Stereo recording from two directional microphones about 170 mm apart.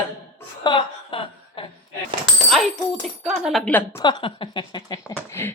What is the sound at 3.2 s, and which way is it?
Speech, 5° right (ahead or behind).